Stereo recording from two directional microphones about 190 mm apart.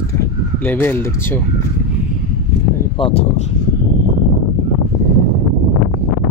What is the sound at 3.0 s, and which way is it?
Speech, 25° left (ahead or behind).